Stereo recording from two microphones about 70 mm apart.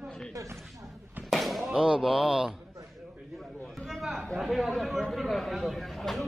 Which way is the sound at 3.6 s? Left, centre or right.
Centre.